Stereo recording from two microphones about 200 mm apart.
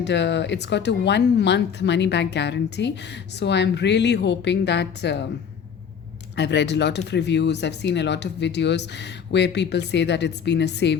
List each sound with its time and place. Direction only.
0.0 s speech: 60° left (ahead or behind)
6.3 s speech: 60° left (ahead or behind)